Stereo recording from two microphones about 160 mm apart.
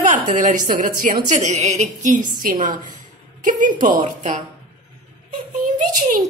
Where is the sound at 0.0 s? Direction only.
50° right (ahead or behind).